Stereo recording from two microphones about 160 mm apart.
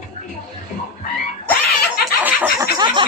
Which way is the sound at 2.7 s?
30° right (ahead or behind).